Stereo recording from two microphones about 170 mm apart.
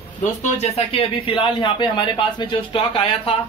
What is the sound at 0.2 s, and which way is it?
Speech, 45° left (ahead or behind).